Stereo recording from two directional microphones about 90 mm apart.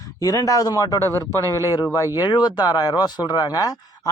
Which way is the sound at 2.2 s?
55° left (ahead or behind).